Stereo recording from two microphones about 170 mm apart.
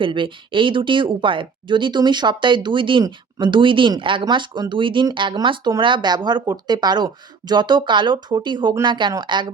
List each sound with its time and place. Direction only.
0.0 s speech: 30° right (ahead or behind)